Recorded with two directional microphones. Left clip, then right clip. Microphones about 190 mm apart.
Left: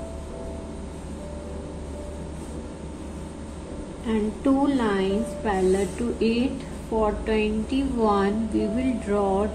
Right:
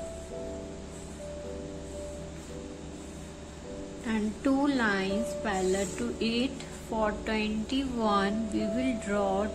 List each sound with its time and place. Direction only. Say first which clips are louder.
4.1 s a woman's voice: left 6 dB; 35° right (ahead or behind)